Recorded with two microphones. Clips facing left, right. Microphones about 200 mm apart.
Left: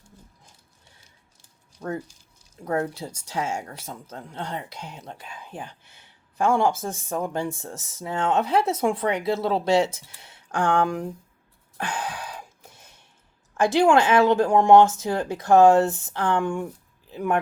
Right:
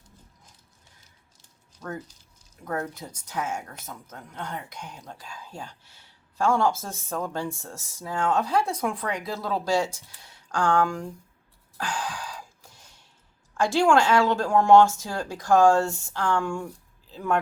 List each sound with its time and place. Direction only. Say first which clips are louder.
2.6 s speech: left 5 dB; 30° left (ahead or behind)
11.8 s a sound: left 1 dB; 20° left (ahead or behind)
13.5 s speech: left 2 dB; 20° left (ahead or behind)